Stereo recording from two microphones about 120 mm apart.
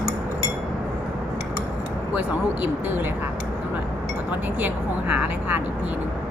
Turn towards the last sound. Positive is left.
turn(degrees=-10)  # may be behind; listen again after turning